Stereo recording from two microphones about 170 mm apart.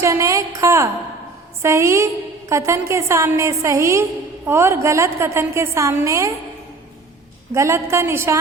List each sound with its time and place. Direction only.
0.0 s a woman's voice: 15° right (ahead or behind)
7.5 s a woman's voice: 15° right (ahead or behind)